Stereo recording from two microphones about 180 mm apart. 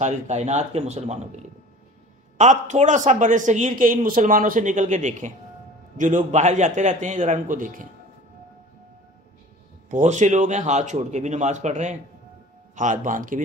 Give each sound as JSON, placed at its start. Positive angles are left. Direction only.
{"t": 0.0, "sound": "a man's voice", "side_deg": -40}
{"t": 9.8, "sound": "a man's voice", "side_deg": -45}